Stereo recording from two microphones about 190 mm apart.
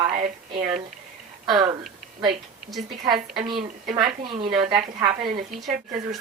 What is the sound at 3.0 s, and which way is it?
A woman's voice, 20° right (ahead or behind).